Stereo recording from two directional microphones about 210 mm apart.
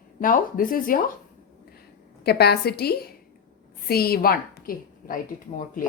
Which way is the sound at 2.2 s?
50° left (ahead or behind).